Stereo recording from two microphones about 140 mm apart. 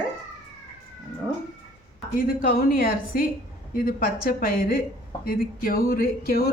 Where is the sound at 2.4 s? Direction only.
90° left.